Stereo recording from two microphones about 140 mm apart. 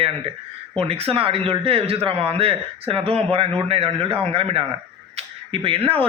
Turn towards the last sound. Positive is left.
turn(degrees=-40)  # may be behind; listen again after turning